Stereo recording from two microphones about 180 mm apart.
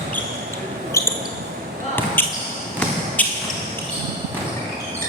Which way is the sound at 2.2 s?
10° left (ahead or behind).